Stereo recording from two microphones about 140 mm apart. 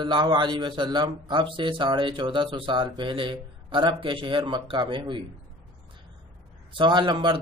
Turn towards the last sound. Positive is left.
turn(degrees=-35)  # may be behind; listen again after turning